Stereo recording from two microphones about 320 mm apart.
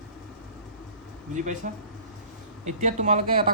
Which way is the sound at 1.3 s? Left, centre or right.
Right.